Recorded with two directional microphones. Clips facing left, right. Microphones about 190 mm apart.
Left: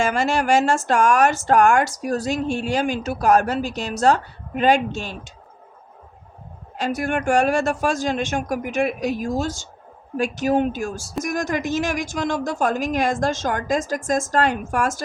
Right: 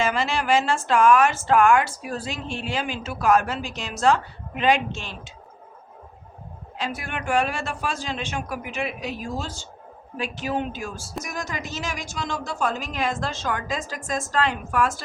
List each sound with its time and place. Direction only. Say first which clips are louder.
0.0 s a woman's voice: left 4 dB; 45° left (ahead or behind)
6.7 s a woman's voice: left 8 dB; 45° left (ahead or behind)